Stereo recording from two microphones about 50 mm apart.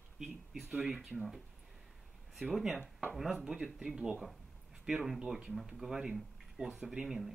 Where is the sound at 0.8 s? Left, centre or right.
Centre.